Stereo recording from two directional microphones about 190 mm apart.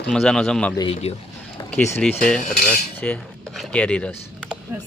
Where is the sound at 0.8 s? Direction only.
30° left (ahead or behind).